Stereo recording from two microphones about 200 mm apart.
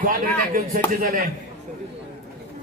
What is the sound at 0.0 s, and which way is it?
Speech, 45° right (ahead or behind).